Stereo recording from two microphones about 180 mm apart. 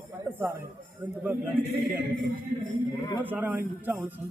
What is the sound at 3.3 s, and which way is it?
Speech, 10° right (ahead or behind).